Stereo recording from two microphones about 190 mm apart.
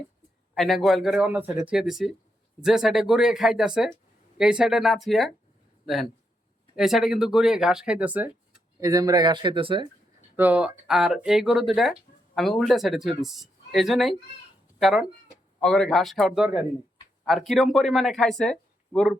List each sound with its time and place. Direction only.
0.5 s speech: centre (ahead or behind)
8.8 s speech: 20° right (ahead or behind)
10.3 s speech: 10° right (ahead or behind)